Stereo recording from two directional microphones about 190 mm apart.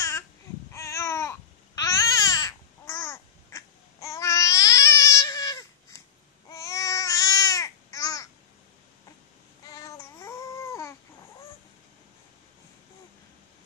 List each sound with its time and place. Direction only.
0.7 s babbling: 15° left (ahead or behind)
9.7 s cat: 15° left (ahead or behind)